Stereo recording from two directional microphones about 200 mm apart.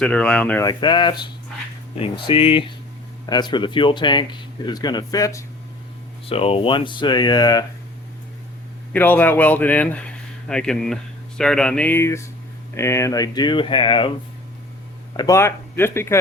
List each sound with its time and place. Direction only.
0.0 s speech: 5° left (ahead or behind)
0.7 s speech: 20° left (ahead or behind)
6.2 s speech: 30° left (ahead or behind)
8.9 s speech: 10° left (ahead or behind); by 14.1 s 25° left (ahead or behind)
15.1 s speech: 20° left (ahead or behind)